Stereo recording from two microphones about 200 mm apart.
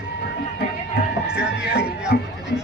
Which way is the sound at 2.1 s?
50° left (ahead or behind).